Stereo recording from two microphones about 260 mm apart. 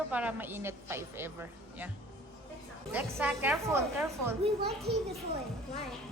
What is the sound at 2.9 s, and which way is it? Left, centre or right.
Speech, centre.